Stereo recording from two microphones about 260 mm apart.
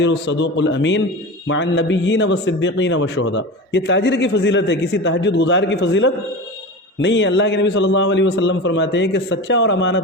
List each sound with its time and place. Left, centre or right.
0.0 s a man's voice: left